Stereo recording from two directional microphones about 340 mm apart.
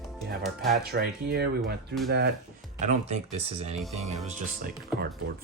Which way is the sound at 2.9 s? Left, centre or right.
Centre.